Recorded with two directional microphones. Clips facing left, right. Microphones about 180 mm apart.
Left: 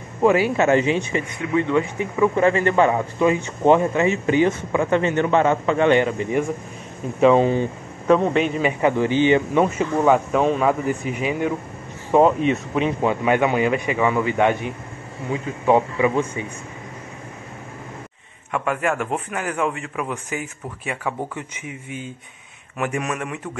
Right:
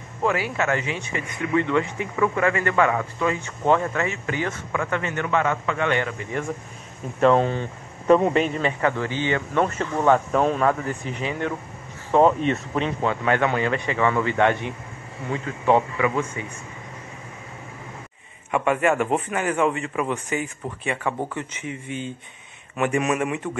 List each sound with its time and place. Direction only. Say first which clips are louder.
0.2 s speech: left 7 dB; 20° left (ahead or behind)
7.2 s speech: left 3 dB; 5° left (ahead or behind)
8.6 s a man's voice: left 4 dB; 15° left (ahead or behind)
15.6 s speech: left 2 dB; 20° left (ahead or behind)
18.5 s speech: right 2 dB; centre (ahead or behind)